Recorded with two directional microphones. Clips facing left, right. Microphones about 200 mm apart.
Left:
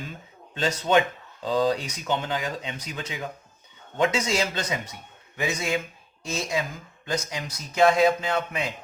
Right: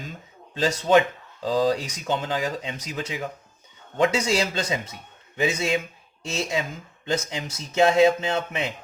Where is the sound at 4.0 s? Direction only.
35° right (ahead or behind).